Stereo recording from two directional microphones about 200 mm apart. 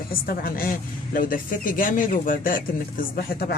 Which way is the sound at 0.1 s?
45° left (ahead or behind).